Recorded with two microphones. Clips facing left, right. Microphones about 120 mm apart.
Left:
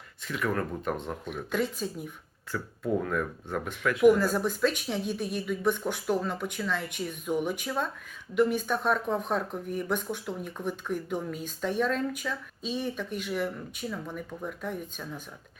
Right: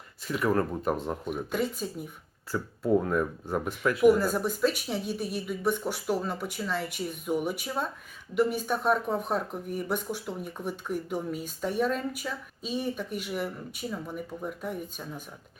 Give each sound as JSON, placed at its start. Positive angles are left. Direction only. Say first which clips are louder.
{"t": 0.3, "sound": "speech", "louder": "right 4 dB", "side_deg": -35}
{"t": 0.9, "sound": "speech", "louder": "right 3 dB", "side_deg": -5}
{"t": 2.5, "sound": "speech", "louder": "right 3 dB", "side_deg": -25}
{"t": 4.0, "sound": "speech", "louder": "left 1 dB", "side_deg": -5}